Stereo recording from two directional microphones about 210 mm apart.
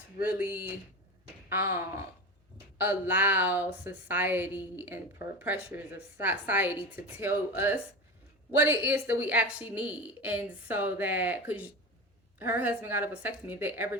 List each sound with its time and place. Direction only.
0.2 s a woman's voice: 10° right (ahead or behind)
6.1 s a woman's voice: 10° right (ahead or behind)